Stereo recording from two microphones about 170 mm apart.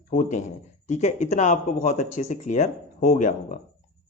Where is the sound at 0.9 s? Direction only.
45° left (ahead or behind).